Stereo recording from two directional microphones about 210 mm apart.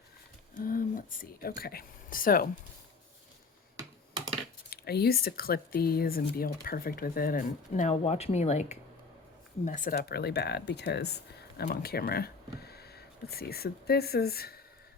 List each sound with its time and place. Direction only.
0.6 s speech: 40° left (ahead or behind)
3.8 s computer keyboard: 20° right (ahead or behind)
4.7 s speech: 50° left (ahead or behind)